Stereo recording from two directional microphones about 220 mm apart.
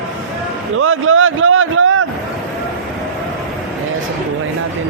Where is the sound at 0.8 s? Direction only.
65° right (ahead or behind).